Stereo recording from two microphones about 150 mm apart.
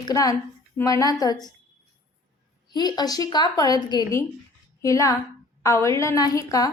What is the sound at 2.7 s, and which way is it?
A woman's voice, 30° left (ahead or behind).